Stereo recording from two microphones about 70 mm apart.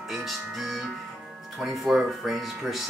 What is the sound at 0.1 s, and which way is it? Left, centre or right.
Speech, centre.